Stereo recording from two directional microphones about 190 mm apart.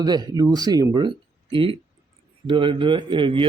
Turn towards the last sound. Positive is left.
turn(degrees=-25)  # may be behind; listen again after turning